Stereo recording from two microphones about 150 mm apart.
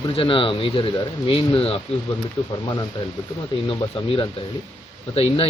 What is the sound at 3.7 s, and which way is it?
Speech, 35° left (ahead or behind).